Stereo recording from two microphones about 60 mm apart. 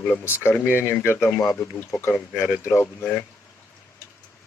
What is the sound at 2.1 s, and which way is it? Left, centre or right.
Speech, left.